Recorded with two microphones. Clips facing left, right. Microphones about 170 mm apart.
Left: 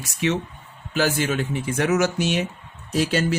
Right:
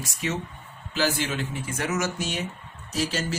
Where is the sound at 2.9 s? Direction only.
60° left (ahead or behind).